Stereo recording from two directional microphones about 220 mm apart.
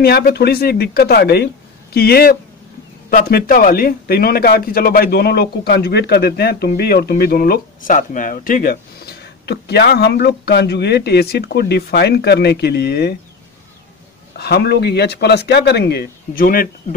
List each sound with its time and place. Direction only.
0.0 s a man's voice: 45° left (ahead or behind)
14.3 s a man's voice: 45° left (ahead or behind)